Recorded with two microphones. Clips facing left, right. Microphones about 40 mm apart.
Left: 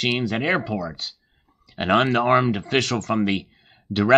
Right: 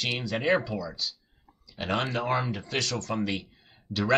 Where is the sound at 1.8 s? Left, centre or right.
Left.